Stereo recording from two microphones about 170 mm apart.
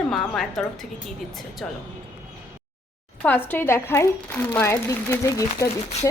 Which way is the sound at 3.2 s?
10° left (ahead or behind).